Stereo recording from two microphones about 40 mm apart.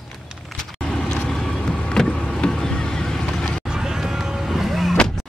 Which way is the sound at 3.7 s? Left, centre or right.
Centre.